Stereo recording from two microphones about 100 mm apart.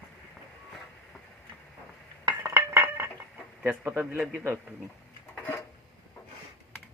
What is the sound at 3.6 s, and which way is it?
Speech, 20° right (ahead or behind).